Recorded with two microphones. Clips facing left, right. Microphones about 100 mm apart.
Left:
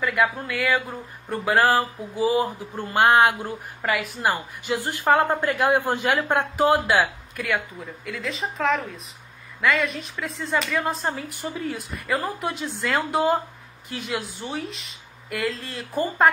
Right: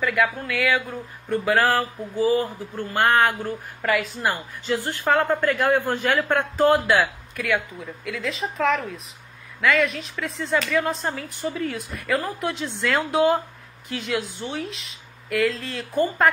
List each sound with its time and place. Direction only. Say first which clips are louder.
0.0 s a man's voice: even; centre (ahead or behind)
3.8 s speech: right 2 dB; centre (ahead or behind)
4.3 s a man's voice: left 1 dB; 15° left (ahead or behind)
6.7 s speech: right 1 dB; centre (ahead or behind)